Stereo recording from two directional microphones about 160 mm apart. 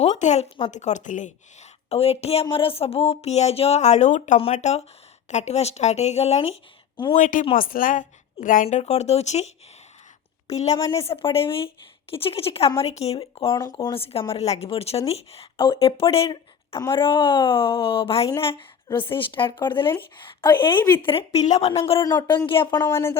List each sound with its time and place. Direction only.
0.0 s speech: 45° left (ahead or behind)
1.9 s a woman's voice: 40° left (ahead or behind)
7.2 s a woman's voice: 55° left (ahead or behind)
8.6 s a woman's voice: 40° left (ahead or behind)
10.8 s speech: 20° left (ahead or behind)
11.0 s a woman's voice: 35° left (ahead or behind)
18.3 s speech: 15° left (ahead or behind)
18.5 s a woman's voice: 30° left (ahead or behind)
20.7 s speech: 10° left (ahead or behind)
21.0 s a woman's voice: 35° left (ahead or behind)
22.0 s a woman's voice: 25° left (ahead or behind)
22.8 s speech: 15° left (ahead or behind)